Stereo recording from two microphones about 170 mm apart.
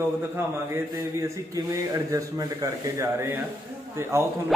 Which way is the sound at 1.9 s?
20° right (ahead or behind).